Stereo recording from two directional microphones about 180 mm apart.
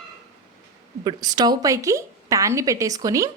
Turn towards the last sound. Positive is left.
turn(degrees=-20)  # may be behind; listen again after turning